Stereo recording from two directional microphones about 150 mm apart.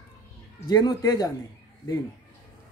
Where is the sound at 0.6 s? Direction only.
25° left (ahead or behind).